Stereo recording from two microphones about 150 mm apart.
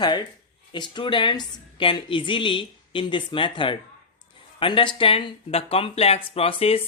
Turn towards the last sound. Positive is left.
turn(degrees=40)  # may be behind; listen again after turning